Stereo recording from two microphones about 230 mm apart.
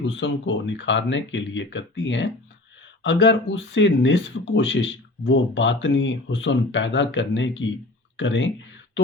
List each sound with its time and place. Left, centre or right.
0.0 s speech: left